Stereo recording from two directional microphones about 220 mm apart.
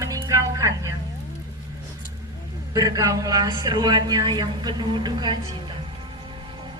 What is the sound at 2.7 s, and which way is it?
A man's voice, 15° right (ahead or behind).